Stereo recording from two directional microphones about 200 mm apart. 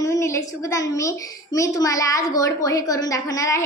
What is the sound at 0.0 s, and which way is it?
A woman's voice, 15° left (ahead or behind).